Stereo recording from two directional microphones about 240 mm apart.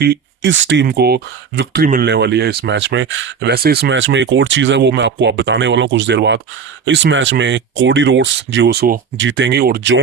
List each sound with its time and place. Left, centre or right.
0.0 s speech: right